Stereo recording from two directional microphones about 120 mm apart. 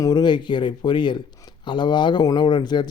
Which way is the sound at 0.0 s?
40° left (ahead or behind).